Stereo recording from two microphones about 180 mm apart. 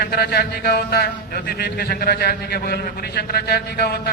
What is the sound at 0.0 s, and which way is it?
A man's voice, 60° left (ahead or behind).